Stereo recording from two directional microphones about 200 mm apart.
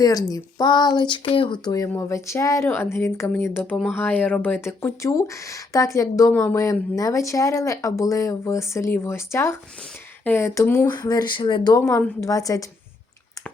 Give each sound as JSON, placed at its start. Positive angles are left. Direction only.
{"t": 0.0, "sound": "speech", "side_deg": 20}